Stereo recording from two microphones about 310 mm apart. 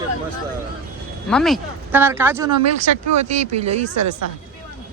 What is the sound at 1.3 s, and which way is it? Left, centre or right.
Speech, centre.